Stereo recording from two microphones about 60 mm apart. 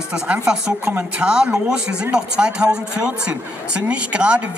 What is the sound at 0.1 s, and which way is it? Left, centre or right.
A man's voice, centre.